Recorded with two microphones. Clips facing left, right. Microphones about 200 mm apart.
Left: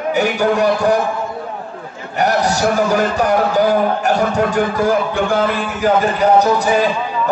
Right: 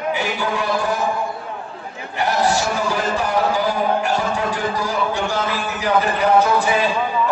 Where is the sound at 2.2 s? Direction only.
45° left (ahead or behind).